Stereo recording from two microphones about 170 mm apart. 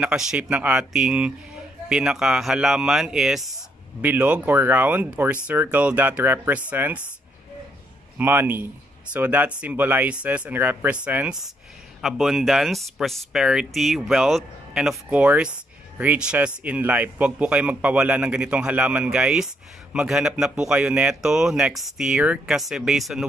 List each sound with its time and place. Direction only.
0.0 s speech: 5° right (ahead or behind)
8.2 s speech: 10° right (ahead or behind)